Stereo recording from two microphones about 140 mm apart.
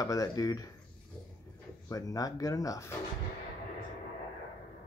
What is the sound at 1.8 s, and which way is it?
Speech, 25° left (ahead or behind).